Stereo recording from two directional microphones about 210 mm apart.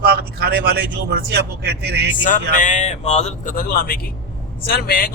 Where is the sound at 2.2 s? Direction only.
40° left (ahead or behind).